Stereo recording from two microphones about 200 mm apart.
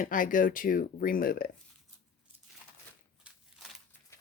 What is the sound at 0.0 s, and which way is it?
Speech, 40° left (ahead or behind).